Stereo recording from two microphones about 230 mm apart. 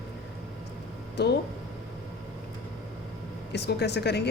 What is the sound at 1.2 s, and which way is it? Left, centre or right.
Speech, left.